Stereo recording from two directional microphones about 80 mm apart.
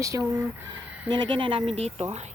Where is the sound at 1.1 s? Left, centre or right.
Right.